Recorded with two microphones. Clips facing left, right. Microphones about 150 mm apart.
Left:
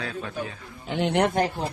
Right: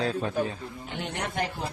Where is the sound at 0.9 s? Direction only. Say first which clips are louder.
Left 12 dB; 80° left.